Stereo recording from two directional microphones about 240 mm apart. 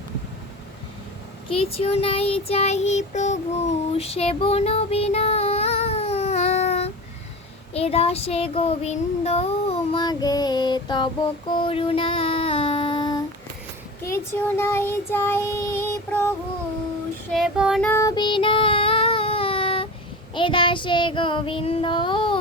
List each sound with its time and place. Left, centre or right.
1.5 s child singing: left
14.6 s child singing: centre
17.3 s child singing: centre
17.8 s child singing: centre